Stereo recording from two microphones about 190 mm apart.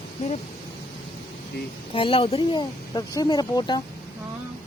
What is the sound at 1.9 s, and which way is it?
Speech, 30° left (ahead or behind).